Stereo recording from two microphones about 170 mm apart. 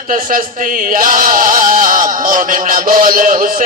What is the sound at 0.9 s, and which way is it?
Music, 55° right (ahead or behind).